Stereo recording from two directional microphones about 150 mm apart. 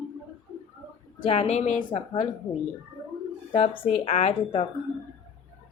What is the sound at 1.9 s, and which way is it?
Speech, 30° left (ahead or behind).